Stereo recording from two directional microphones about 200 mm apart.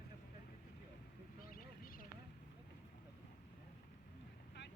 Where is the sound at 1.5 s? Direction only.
45° left (ahead or behind).